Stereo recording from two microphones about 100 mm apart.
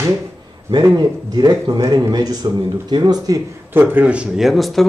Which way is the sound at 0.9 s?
40° right (ahead or behind).